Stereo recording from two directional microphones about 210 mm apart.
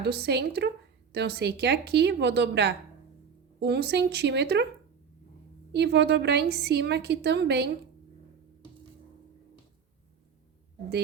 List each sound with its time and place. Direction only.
0.0 s a woman's voice: 50° right (ahead or behind)
5.7 s a woman's voice: 55° right (ahead or behind)